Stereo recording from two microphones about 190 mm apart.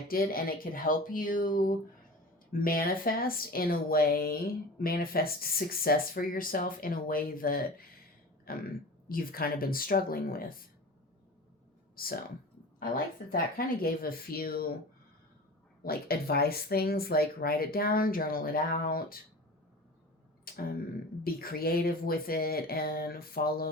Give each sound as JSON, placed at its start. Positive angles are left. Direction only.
{"t": 0.1, "sound": "speech", "side_deg": 50}
{"t": 12.0, "sound": "speech", "side_deg": 50}
{"t": 13.3, "sound": "speech", "side_deg": 50}
{"t": 15.8, "sound": "speech", "side_deg": 55}
{"t": 20.5, "sound": "a sound", "side_deg": 50}
{"t": 21.2, "sound": "speech", "side_deg": 50}